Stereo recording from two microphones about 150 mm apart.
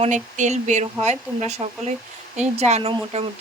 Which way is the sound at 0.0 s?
50° right (ahead or behind).